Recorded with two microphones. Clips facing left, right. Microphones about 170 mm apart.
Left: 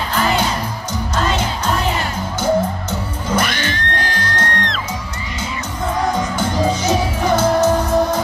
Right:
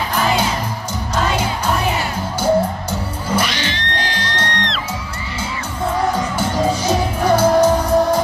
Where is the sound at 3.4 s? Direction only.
50° left (ahead or behind).